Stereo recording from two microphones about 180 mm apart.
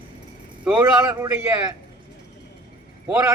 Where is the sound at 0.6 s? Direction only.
10° right (ahead or behind).